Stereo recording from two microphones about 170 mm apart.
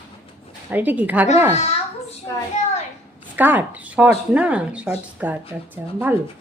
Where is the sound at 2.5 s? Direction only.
40° left (ahead or behind).